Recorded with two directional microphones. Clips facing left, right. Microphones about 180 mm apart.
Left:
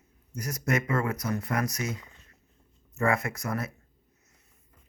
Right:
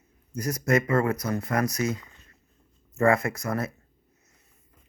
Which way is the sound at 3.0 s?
35° right (ahead or behind).